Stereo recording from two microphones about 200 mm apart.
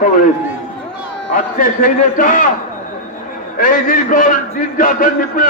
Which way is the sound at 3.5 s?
40° left (ahead or behind).